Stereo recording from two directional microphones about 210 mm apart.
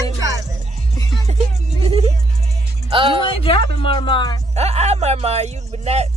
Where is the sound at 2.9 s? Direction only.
25° right (ahead or behind).